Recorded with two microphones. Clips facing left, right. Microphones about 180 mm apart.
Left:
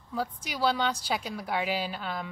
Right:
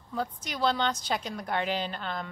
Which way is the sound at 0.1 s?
5° left (ahead or behind).